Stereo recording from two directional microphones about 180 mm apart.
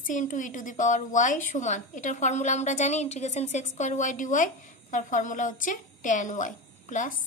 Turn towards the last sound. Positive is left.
turn(degrees=45)  # may be behind; listen again after turning